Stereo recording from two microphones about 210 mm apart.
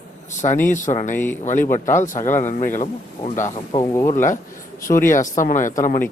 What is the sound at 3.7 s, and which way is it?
Speech, 15° left (ahead or behind).